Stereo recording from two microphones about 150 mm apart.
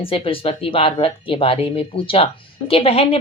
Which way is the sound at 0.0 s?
40° left (ahead or behind).